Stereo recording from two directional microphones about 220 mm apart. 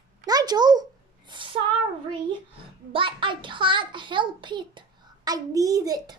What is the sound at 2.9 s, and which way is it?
A child's voice, 20° right (ahead or behind).